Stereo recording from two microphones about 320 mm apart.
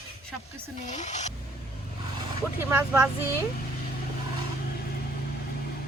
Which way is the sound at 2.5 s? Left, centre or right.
Centre.